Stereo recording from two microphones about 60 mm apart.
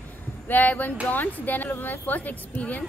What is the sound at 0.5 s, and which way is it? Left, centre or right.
A woman's voice, left.